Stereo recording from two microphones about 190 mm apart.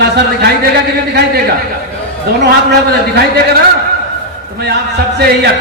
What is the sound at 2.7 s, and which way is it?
Speech, 60° right (ahead or behind).